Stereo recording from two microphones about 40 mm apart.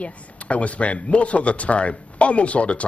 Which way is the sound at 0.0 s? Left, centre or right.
Left.